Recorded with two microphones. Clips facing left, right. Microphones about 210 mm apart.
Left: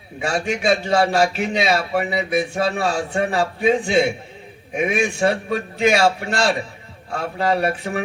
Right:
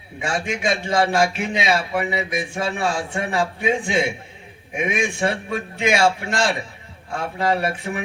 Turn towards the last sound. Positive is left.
turn(degrees=35)  # may be behind; listen again after turning